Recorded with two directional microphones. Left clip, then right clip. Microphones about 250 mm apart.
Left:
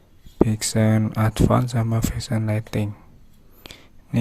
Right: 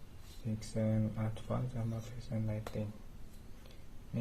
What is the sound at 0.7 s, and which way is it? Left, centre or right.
Speech, left.